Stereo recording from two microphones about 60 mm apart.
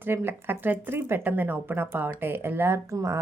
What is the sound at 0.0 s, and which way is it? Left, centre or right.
Speech, right.